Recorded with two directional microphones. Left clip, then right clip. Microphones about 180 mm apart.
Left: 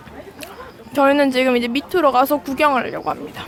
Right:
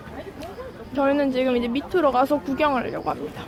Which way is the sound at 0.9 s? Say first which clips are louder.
Left 7 dB; 30° left (ahead or behind).